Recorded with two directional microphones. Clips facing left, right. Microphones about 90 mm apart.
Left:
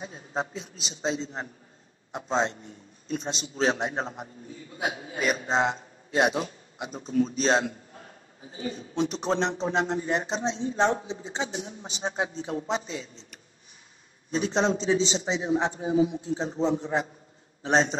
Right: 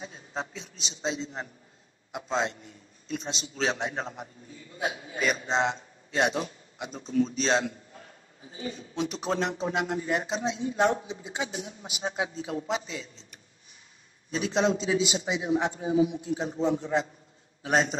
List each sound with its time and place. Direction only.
0.0 s a man's voice: 40° left (ahead or behind)
6.1 s a man's voice: 5° left (ahead or behind)
7.1 s a man's voice: 40° left (ahead or behind)
14.3 s a man's voice: 35° left (ahead or behind)
16.0 s a man's voice: 15° right (ahead or behind)
16.3 s a man's voice: 25° left (ahead or behind)
17.6 s a man's voice: 35° left (ahead or behind)